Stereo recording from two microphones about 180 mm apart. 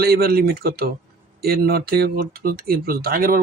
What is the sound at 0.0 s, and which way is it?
Speech, 60° right (ahead or behind).